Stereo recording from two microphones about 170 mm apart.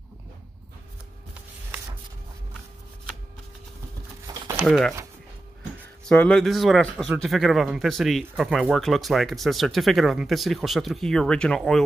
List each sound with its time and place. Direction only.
4.3 s crumpling: 15° right (ahead or behind)
4.6 s a man's voice: centre (ahead or behind)
6.0 s a man's voice: 5° left (ahead or behind)